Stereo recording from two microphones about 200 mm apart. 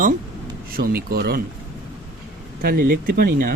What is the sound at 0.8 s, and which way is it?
Speech, 50° right (ahead or behind).